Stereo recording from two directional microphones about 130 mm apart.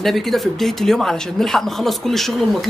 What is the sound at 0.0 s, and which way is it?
Speech, centre (ahead or behind).